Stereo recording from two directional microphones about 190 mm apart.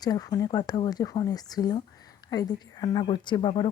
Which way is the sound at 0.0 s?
20° left (ahead or behind).